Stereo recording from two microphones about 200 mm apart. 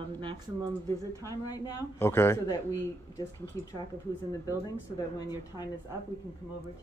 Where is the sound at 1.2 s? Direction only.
15° left (ahead or behind).